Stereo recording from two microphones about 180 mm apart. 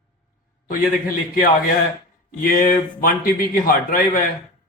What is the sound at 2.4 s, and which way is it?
A man's voice, 50° left (ahead or behind).